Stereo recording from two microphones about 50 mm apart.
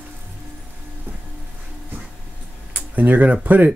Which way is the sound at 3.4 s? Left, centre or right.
Right.